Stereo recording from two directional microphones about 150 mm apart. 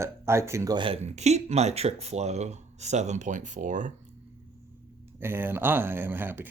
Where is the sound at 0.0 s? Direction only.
15° right (ahead or behind).